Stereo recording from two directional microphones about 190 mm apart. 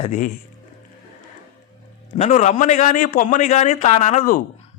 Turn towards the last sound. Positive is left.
turn(degrees=40)  # may be behind; listen again after turning